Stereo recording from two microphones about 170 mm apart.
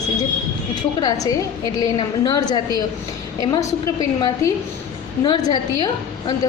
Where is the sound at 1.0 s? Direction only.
20° left (ahead or behind).